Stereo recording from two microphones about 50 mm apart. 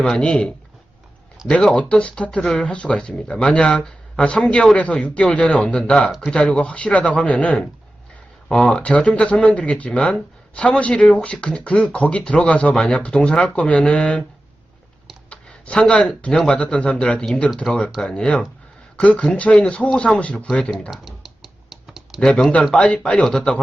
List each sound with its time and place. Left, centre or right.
0.0 s speech: centre
1.7 s speech: left
13.5 s speech: left
15.3 s speech: left
20.9 s typing: centre
22.2 s speech: centre